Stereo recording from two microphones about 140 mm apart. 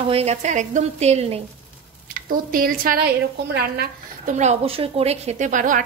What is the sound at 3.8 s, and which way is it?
Speech, 65° right (ahead or behind).